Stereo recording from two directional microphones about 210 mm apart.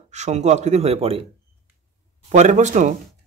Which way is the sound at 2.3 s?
35° right (ahead or behind).